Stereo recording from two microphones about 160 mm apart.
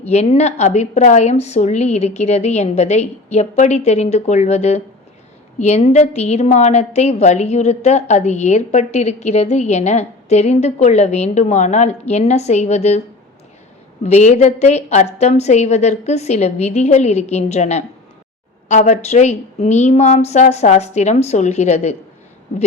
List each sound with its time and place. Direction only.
0.0 s a woman's voice: 45° left (ahead or behind)
14.0 s a woman's voice: 45° left (ahead or behind)